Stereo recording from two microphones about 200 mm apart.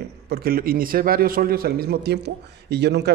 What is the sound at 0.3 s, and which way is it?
A man's voice, 50° right (ahead or behind).